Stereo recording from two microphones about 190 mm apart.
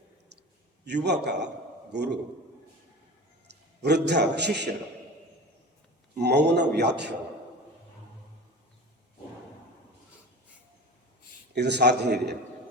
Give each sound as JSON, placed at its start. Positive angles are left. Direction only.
{"t": 0.9, "sound": "a man's voice", "side_deg": -65}
{"t": 3.4, "sound": "a man's voice", "side_deg": -60}
{"t": 6.1, "sound": "a man's voice", "side_deg": -60}
{"t": 11.5, "sound": "a man's voice", "side_deg": -65}